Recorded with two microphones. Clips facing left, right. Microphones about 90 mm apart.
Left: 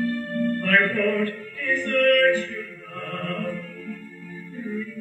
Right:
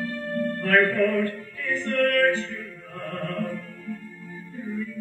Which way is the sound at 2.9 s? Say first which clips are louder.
Left 1 dB; 20° right (ahead or behind).